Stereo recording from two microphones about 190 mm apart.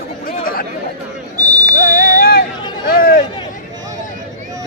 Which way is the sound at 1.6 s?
45° left (ahead or behind).